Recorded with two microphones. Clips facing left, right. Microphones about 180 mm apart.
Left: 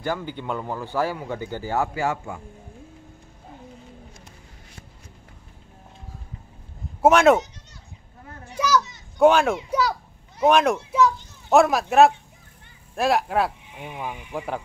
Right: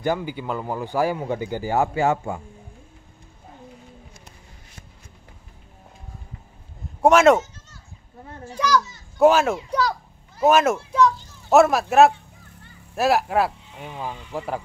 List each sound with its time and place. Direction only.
0.0 s a man's voice: 15° right (ahead or behind)
7.0 s speech: centre (ahead or behind)
8.5 s children playing: 10° left (ahead or behind)
9.2 s a child's voice: centre (ahead or behind)
13.7 s speech: 15° left (ahead or behind)